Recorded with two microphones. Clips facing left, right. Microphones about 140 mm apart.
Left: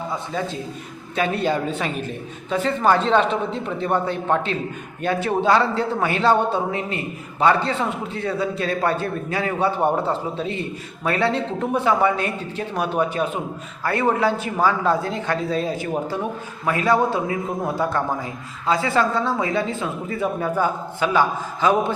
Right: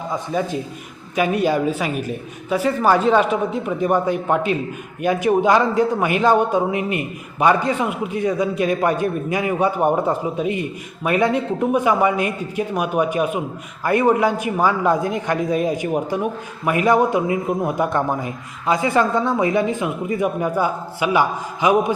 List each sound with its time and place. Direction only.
0.1 s a man's voice: 15° right (ahead or behind)